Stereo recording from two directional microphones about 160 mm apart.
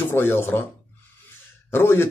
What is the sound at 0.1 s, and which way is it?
Speech, 15° left (ahead or behind).